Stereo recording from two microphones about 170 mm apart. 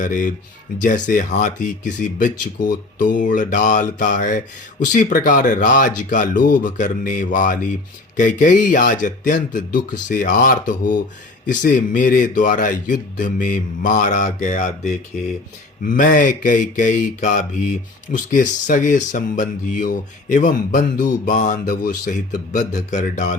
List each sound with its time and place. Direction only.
0.0 s speech: 50° left (ahead or behind)
21.7 s speech: 65° left (ahead or behind)
22.5 s speech: 45° left (ahead or behind)